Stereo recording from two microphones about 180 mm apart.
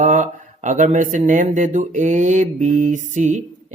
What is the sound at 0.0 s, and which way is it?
Mantra, 45° right (ahead or behind).